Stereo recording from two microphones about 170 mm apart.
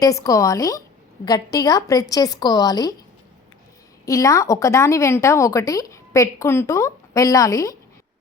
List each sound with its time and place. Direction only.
0.0 s a woman's voice: 20° left (ahead or behind)
4.0 s a woman's voice: 20° left (ahead or behind)